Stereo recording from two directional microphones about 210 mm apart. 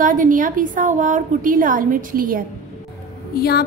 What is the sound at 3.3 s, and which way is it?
Speech, 50° left (ahead or behind).